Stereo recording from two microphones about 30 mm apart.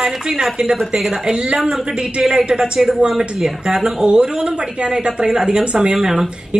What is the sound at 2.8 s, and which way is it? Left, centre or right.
A woman's voice, centre.